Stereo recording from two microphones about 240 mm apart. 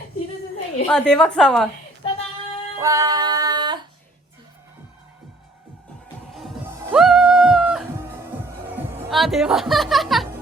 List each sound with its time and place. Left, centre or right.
0.9 s speech: centre
2.8 s music: centre
6.9 s music: centre
9.0 s speech: centre